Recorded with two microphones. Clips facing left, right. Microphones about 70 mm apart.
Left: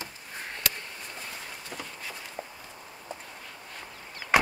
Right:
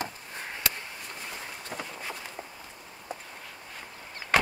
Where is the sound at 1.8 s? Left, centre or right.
Right.